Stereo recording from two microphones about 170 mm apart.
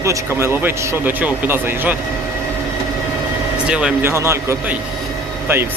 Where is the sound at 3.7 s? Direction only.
5° right (ahead or behind).